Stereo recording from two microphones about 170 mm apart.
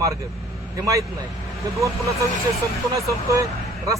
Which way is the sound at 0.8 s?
20° right (ahead or behind).